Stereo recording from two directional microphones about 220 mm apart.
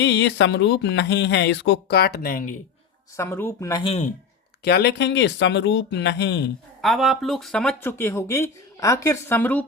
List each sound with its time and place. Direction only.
0.0 s speech: 50° left (ahead or behind)
3.2 s speech: 10° left (ahead or behind); by 4.1 s 25° left (ahead or behind)
4.6 s speech: 50° left (ahead or behind)
6.8 s speech: centre (ahead or behind)